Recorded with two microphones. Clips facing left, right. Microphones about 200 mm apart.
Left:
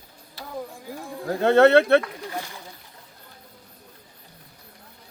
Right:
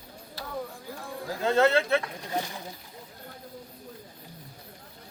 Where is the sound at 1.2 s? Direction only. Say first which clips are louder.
Left 7 dB; 65° left (ahead or behind).